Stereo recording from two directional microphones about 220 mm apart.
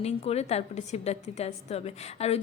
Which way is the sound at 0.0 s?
30° left (ahead or behind).